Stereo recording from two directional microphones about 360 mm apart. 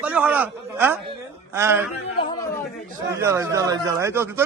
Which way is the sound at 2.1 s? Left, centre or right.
Centre.